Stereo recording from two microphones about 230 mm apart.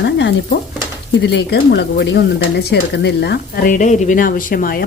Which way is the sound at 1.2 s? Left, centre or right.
Left.